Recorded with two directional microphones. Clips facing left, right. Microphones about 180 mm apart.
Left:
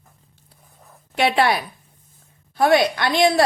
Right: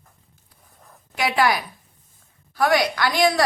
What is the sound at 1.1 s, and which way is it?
A woman's voice, 30° left (ahead or behind).